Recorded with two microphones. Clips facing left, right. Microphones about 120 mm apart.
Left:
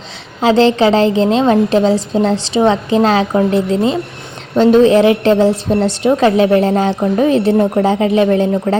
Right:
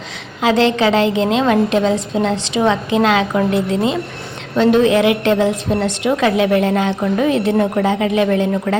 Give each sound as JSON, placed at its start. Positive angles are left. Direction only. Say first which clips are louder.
{"t": 0.4, "sound": "a woman's voice", "louder": "left 4 dB", "side_deg": 30}